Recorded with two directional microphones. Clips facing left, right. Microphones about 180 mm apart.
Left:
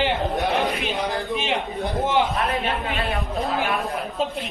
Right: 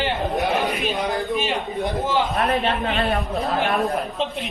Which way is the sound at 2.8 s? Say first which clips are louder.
Right 4 dB; 45° right (ahead or behind).